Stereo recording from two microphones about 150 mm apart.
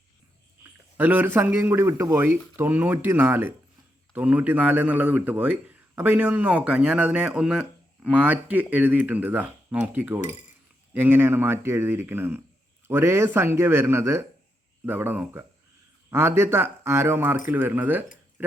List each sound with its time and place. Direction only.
0.9 s a man's voice: 10° right (ahead or behind)